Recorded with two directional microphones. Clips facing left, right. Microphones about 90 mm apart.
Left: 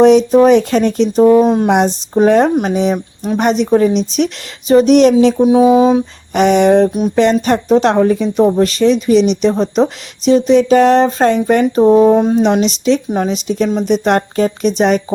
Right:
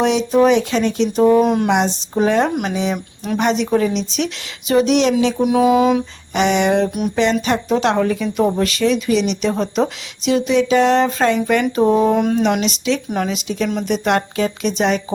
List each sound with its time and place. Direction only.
0.0 s speech: 40° left (ahead or behind)
1.4 s a sound: 30° left (ahead or behind)
1.7 s speech: 45° left (ahead or behind)
5.4 s a sound: 25° left (ahead or behind)
6.3 s speech: 45° left (ahead or behind)
7.2 s speech: 45° left (ahead or behind)